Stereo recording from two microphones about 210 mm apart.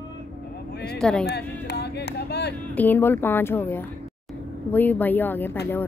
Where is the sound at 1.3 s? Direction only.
50° left (ahead or behind).